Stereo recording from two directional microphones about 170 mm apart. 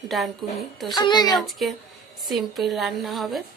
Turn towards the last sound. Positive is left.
turn(degrees=0)  # may be behind; listen again after turning